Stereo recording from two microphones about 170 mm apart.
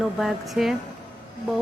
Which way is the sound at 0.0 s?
Centre (ahead or behind).